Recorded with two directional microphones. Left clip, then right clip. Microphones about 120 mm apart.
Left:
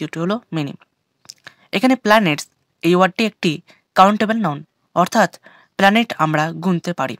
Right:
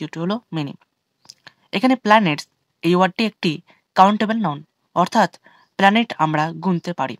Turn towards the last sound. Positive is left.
turn(degrees=30)  # may be behind; listen again after turning